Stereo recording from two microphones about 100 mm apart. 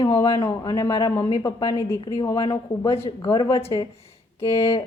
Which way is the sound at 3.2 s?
45° left (ahead or behind).